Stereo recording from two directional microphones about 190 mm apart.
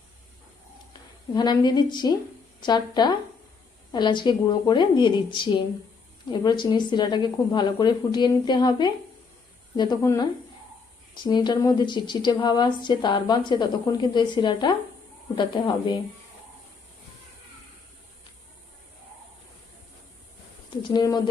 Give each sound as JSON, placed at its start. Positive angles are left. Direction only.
{"t": 1.3, "sound": "a woman's voice", "side_deg": 20}
{"t": 11.3, "sound": "a woman's voice", "side_deg": 20}
{"t": 20.8, "sound": "a woman's voice", "side_deg": 20}